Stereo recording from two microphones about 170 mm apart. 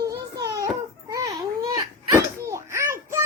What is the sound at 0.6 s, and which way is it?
Crying, 20° right (ahead or behind).